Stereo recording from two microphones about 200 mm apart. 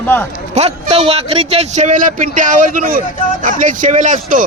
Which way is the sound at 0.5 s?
30° right (ahead or behind).